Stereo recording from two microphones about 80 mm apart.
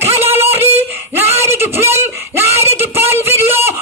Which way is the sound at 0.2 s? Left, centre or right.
Right.